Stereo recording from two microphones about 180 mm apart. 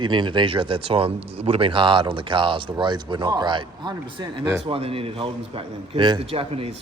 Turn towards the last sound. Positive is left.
turn(degrees=-35)  # may be behind; listen again after turning